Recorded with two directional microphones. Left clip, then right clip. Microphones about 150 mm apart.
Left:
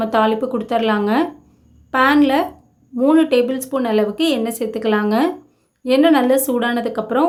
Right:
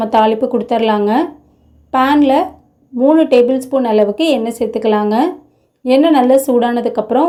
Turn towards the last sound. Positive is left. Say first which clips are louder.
# right 4 dB
turn(degrees=-15)  # may be behind; listen again after turning